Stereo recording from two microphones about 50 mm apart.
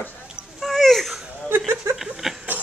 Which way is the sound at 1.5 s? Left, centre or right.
Right.